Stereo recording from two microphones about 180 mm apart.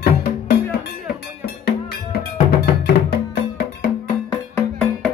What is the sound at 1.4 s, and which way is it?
Cowbell, 60° left (ahead or behind).